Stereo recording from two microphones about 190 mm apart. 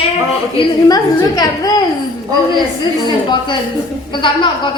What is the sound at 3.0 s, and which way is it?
A woman's voice, 25° left (ahead or behind).